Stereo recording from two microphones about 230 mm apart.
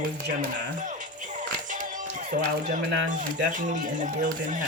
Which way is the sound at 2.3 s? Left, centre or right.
Right.